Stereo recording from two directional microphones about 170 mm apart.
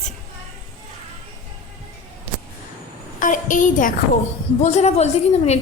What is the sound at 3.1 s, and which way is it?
A woman's voice, 50° left (ahead or behind).